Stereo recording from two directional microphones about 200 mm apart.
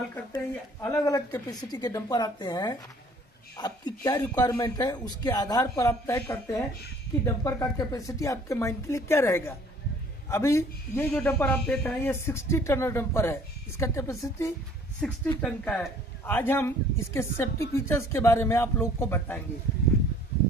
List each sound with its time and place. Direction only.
0.3 s a woman's voice: 15° left (ahead or behind)
15.0 s speech: 5° left (ahead or behind)